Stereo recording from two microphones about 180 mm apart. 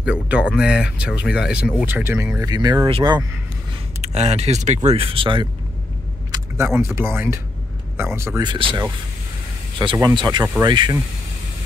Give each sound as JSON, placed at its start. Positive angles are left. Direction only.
{"t": 0.0, "sound": "speech", "side_deg": -5}
{"t": 4.0, "sound": "speech", "side_deg": -40}
{"t": 6.3, "sound": "speech", "side_deg": -15}
{"t": 8.5, "sound": "speech", "side_deg": -25}
{"t": 9.9, "sound": "speech", "side_deg": -20}